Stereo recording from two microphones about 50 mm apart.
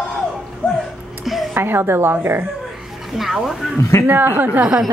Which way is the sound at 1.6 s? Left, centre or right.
Right.